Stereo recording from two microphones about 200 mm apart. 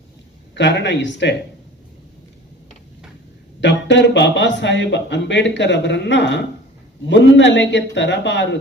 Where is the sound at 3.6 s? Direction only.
65° left (ahead or behind).